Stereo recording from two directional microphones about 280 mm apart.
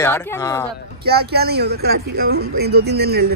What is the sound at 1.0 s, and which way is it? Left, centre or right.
Speech, right.